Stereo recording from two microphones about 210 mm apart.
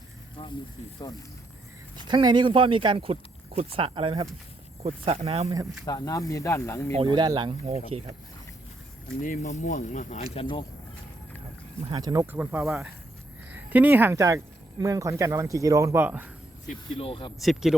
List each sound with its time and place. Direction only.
2.0 s speech: 20° right (ahead or behind)
5.8 s speech: 15° left (ahead or behind)
6.9 s speech: 25° right (ahead or behind)
9.2 s speech: 35° left (ahead or behind)
11.9 s speech: 20° right (ahead or behind)
16.6 s speech: 25° left (ahead or behind)
17.4 s speech: centre (ahead or behind)